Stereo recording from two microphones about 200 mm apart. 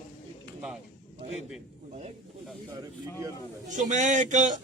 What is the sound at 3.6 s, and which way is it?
Speech, 35° right (ahead or behind).